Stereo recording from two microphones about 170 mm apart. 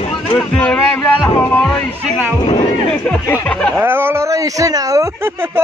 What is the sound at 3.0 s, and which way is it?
Speech, 10° left (ahead or behind).